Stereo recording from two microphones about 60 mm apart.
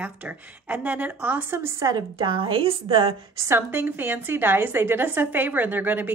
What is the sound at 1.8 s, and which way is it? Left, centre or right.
Speech, right.